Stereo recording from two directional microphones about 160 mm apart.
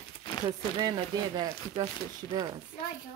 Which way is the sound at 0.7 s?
25° right (ahead or behind).